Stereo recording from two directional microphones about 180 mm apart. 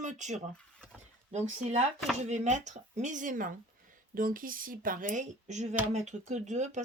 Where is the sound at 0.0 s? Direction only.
40° right (ahead or behind).